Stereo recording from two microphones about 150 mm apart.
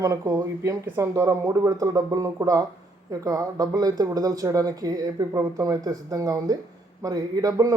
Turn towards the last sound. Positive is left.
turn(degrees=-25)  # may be behind; listen again after turning